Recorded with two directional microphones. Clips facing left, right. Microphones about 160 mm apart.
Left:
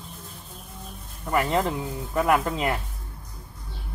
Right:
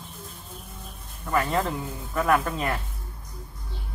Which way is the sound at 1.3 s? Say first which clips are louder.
Left 1 dB; 20° left (ahead or behind).